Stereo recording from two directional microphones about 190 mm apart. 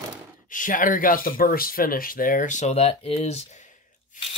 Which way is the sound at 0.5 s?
45° left (ahead or behind).